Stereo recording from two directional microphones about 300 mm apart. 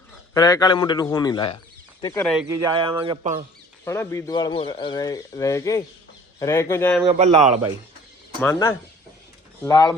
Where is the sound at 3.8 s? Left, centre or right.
Centre.